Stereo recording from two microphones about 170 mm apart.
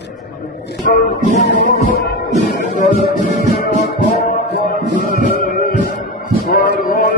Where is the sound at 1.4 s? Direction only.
85° left.